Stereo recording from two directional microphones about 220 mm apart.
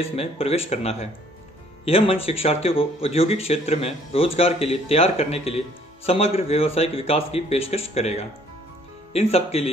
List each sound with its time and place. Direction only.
0.0 s a man's voice: 25° left (ahead or behind)